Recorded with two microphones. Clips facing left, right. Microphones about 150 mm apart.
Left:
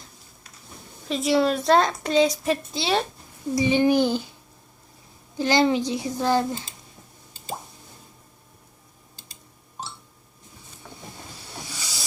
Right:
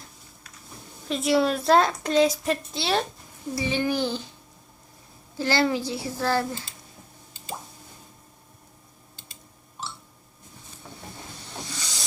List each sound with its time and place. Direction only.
1.0 s a woman's voice: centre (ahead or behind)
3.5 s a child's voice: 15° left (ahead or behind)
5.4 s a child's voice: 20° left (ahead or behind)
11.4 s hiss: 10° left (ahead or behind)